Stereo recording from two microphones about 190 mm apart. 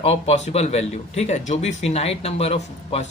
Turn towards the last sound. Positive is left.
turn(degrees=35)  # may be behind; listen again after turning